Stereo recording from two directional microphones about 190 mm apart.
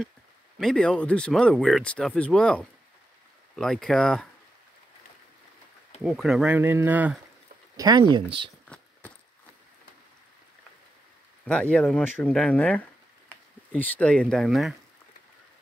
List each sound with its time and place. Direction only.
0.6 s speech: 5° left (ahead or behind)
6.0 s speech: centre (ahead or behind)
7.7 s speech: 20° right (ahead or behind)
8.6 s a sound: 5° left (ahead or behind)
11.4 s speech: 5° left (ahead or behind)